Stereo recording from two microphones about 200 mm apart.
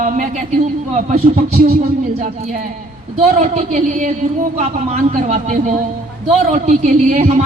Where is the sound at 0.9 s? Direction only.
30° right (ahead or behind).